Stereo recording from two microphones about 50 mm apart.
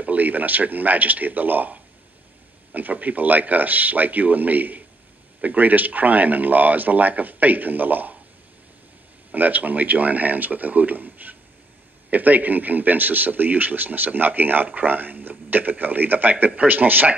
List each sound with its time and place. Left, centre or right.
0.0 s a man's voice: right
9.3 s a man's voice: right